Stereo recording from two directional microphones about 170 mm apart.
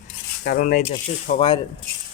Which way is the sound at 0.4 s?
55° left (ahead or behind).